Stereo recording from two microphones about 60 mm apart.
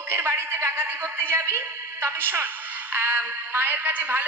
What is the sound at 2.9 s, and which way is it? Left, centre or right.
Speech, right.